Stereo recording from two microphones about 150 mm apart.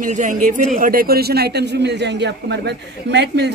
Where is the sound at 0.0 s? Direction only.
60° right (ahead or behind); by 1.7 s 90° right.